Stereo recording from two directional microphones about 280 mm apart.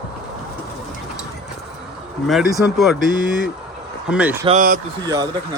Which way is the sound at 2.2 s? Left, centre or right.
Centre.